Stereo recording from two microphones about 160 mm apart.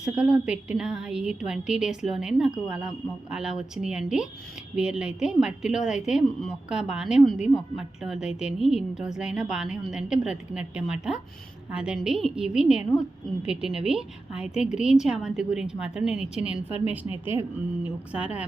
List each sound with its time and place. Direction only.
0.0 s a woman's voice: 5° right (ahead or behind)
16.5 s a woman's voice: 40° left (ahead or behind)
16.9 s a woman's voice: 10° right (ahead or behind)